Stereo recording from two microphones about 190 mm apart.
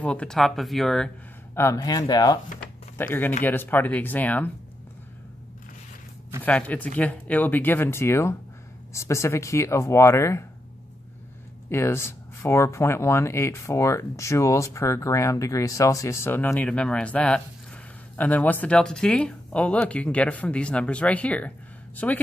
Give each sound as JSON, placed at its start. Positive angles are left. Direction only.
{"t": 0.0, "sound": "speech", "side_deg": 5}
{"t": 1.5, "sound": "speech", "side_deg": 15}
{"t": 3.0, "sound": "speech", "side_deg": 10}
{"t": 6.4, "sound": "speech", "side_deg": 5}
{"t": 11.7, "sound": "speech", "side_deg": 15}